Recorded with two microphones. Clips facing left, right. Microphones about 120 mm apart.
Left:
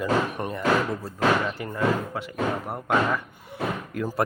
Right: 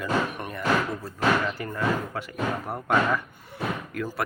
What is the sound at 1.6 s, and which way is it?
Speech, 15° left (ahead or behind).